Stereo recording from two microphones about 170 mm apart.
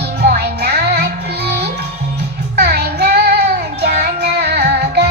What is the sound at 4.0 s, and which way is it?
Music, 75° right (ahead or behind).